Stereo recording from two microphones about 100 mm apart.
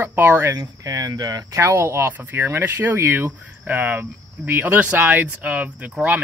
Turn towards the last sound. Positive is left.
turn(degrees=-15)  # may be behind; listen again after turning